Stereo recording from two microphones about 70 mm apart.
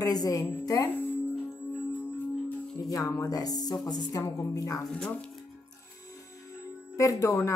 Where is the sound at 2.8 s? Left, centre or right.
Left.